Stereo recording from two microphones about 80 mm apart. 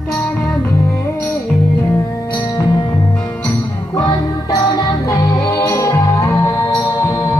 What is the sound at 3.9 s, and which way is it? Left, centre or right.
Music, left.